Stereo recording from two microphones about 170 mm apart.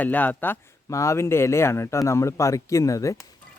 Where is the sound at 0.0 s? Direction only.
10° left (ahead or behind).